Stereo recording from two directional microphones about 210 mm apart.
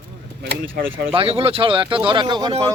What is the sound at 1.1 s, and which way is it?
Speech, 25° right (ahead or behind).